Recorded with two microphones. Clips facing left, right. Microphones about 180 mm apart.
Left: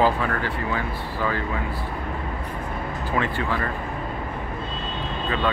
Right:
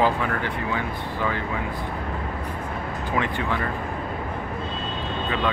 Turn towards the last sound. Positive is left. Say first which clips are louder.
# even
turn(degrees=-15)  # may be behind; listen again after turning